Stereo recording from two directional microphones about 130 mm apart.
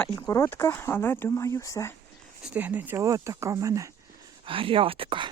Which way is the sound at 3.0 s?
25° right (ahead or behind).